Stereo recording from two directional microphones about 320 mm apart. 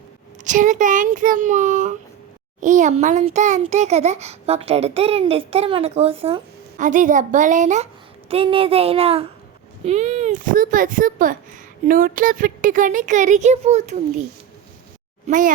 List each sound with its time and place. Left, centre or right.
0.4 s a child's voice: right
15.3 s a child's voice: right